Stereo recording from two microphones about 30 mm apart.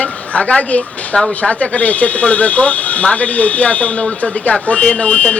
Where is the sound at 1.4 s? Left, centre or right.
Left.